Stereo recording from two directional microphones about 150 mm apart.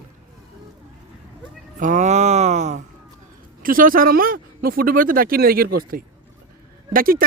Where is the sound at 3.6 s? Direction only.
70° right (ahead or behind).